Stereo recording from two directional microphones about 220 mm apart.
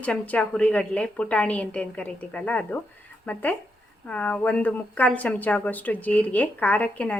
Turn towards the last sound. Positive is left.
turn(degrees=5)  # may be behind; listen again after turning